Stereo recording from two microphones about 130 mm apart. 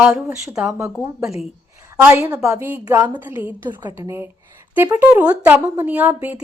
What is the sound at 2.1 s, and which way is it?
A woman's voice, 15° right (ahead or behind).